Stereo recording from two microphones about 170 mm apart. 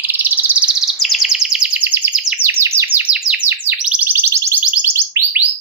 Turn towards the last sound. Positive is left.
turn(degrees=-15)  # may be behind; listen again after turning